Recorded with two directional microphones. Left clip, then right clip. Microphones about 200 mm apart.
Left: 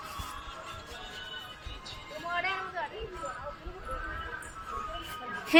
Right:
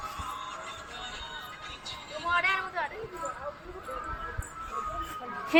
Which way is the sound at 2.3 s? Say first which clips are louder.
Right 5 dB; 35° right (ahead or behind).